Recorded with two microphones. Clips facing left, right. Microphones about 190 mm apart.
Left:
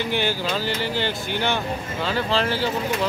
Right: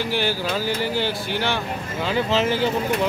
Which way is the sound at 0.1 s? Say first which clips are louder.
Right 1 dB; 5° right (ahead or behind).